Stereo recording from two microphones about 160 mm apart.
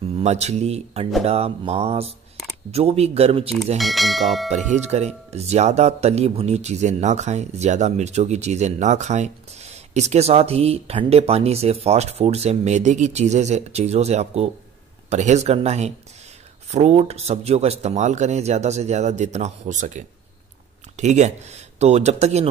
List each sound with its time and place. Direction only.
0.2 s speech: 45° right (ahead or behind)
3.7 s speech: centre (ahead or behind)
4.7 s speech: 45° right (ahead or behind)